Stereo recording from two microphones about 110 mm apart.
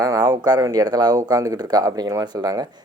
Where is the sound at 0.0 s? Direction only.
35° right (ahead or behind).